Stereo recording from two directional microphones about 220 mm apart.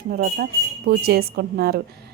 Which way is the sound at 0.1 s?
40° right (ahead or behind).